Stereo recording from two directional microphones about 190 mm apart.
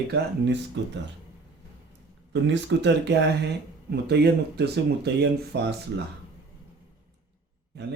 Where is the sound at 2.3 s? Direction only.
65° right (ahead or behind).